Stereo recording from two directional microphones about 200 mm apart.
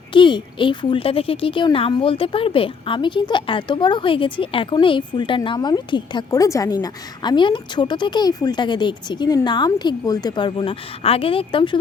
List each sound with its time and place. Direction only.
0.1 s a woman's voice: 25° left (ahead or behind)